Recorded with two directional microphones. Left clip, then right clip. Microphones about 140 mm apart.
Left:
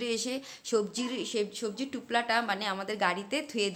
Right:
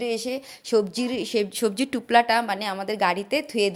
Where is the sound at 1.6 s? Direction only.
60° right (ahead or behind); by 3.7 s 35° right (ahead or behind).